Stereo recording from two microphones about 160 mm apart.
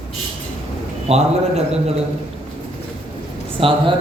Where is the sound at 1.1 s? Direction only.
40° right (ahead or behind).